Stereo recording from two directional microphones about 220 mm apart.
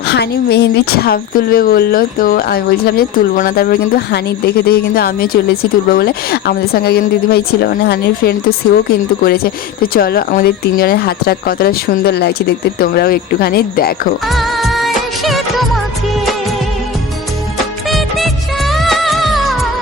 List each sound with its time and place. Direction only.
0.1 s speech: 50° left (ahead or behind)
14.3 s music of bollywood: centre (ahead or behind)
17.8 s music of bollywood: centre (ahead or behind)